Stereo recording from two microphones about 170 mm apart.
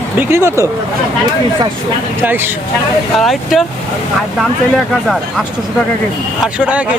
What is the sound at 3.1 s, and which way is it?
Speech, centre (ahead or behind).